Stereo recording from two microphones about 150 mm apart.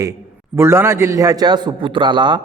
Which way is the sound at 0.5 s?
20° right (ahead or behind).